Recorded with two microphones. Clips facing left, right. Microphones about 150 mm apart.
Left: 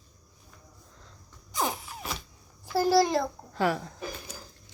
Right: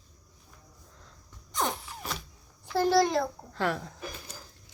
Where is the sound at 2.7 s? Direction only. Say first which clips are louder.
Left 1 dB; 5° left (ahead or behind).